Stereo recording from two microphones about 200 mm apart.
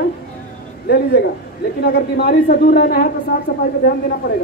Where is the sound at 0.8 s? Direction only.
55° left (ahead or behind).